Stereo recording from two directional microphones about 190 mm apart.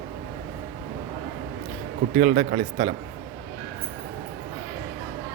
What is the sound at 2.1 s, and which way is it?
Speech, 45° right (ahead or behind).